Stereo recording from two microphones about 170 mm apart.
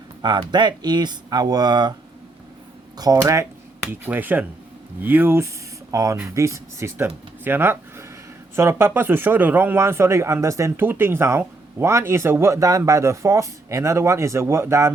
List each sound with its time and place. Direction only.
0.2 s speech: 25° right (ahead or behind)
3.0 s a man's voice: 20° right (ahead or behind)